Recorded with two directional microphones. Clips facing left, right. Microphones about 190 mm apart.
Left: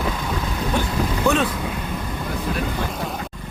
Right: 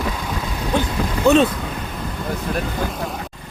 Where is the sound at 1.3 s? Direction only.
20° right (ahead or behind).